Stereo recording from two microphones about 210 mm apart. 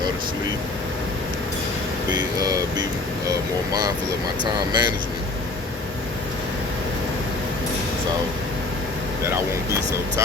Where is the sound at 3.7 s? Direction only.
20° right (ahead or behind).